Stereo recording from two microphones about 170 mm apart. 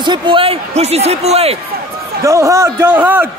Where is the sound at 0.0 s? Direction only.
30° right (ahead or behind).